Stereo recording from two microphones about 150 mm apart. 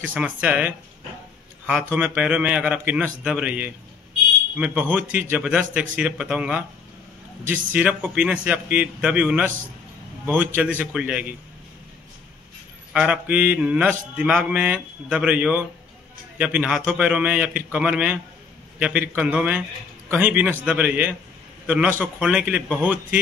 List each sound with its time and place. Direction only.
0.0 s mantra: 10° right (ahead or behind)
7.7 s mantra: 10° right (ahead or behind)
12.9 s mantra: 5° right (ahead or behind)